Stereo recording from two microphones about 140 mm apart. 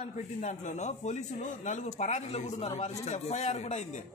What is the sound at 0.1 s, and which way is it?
A man's voice, 60° left (ahead or behind).